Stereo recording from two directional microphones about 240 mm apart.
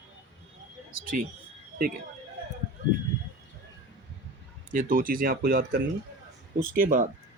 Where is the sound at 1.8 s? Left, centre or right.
Right.